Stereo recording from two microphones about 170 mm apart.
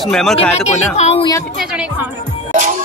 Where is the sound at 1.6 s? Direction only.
5° right (ahead or behind).